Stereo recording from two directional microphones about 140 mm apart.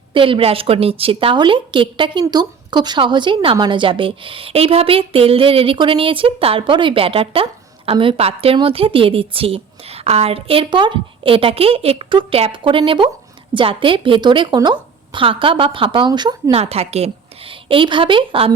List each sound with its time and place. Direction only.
0.1 s a woman's voice: 40° right (ahead or behind)
16.6 s a woman's voice: 45° right (ahead or behind)